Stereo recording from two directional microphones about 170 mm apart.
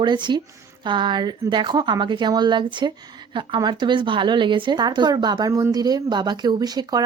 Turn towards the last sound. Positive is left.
turn(degrees=-25)  # may be behind; listen again after turning